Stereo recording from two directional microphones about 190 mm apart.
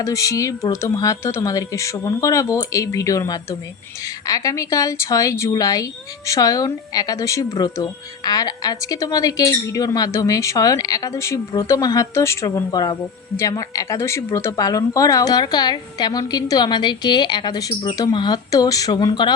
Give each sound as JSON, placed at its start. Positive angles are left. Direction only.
{"t": 0.0, "sound": "speech", "side_deg": 15}